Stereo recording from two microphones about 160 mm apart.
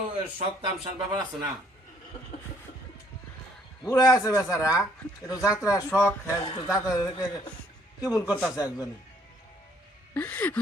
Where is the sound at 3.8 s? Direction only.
20° left (ahead or behind).